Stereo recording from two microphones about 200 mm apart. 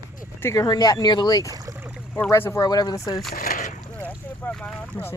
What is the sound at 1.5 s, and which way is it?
Boat, 15° right (ahead or behind).